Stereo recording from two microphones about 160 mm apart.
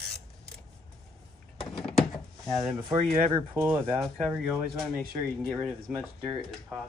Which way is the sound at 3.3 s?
15° right (ahead or behind).